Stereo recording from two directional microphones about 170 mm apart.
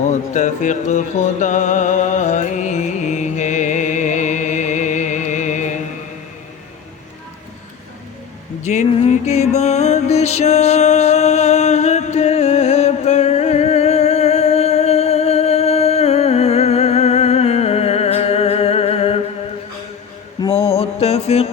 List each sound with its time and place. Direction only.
0.1 s music: 45° left (ahead or behind)
8.6 s music: 45° left (ahead or behind)
20.4 s mantra: 25° left (ahead or behind)
20.7 s music: 35° left (ahead or behind)